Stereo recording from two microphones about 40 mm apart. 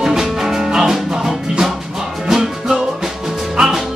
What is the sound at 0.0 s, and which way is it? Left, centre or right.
Music, centre.